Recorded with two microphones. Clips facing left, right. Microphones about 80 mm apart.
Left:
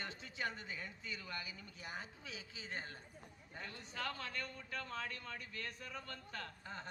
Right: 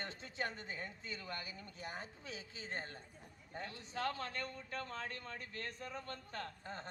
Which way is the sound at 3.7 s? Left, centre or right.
Left.